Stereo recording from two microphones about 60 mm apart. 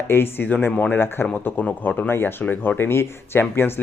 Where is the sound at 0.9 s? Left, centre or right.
Left.